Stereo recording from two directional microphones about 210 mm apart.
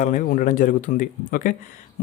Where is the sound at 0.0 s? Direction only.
35° left (ahead or behind).